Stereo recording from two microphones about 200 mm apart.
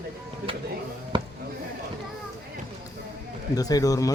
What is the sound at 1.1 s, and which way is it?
Basketball bounce, 25° right (ahead or behind).